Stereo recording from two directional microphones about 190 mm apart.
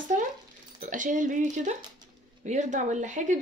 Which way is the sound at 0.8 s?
40° right (ahead or behind).